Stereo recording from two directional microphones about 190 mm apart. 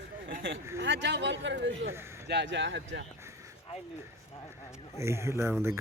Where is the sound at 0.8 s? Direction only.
70° right (ahead or behind).